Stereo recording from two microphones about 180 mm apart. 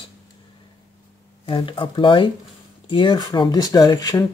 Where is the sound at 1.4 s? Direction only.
30° left (ahead or behind).